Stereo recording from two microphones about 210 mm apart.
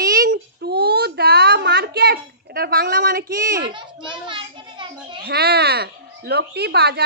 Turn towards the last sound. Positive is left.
turn(degrees=-50)  # may be behind; listen again after turning